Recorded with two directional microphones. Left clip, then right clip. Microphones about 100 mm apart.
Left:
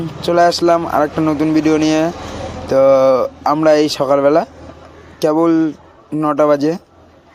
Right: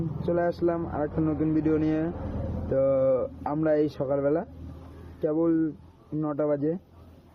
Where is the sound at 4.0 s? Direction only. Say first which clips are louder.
Left 14 dB; 50° left (ahead or behind).